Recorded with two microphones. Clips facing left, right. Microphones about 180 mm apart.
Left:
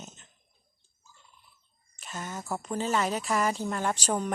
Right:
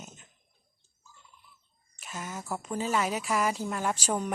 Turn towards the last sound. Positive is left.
turn(degrees=-5)  # may be behind; listen again after turning